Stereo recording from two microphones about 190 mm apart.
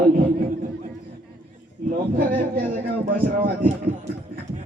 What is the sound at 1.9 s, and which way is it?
A man's voice, 50° right (ahead or behind).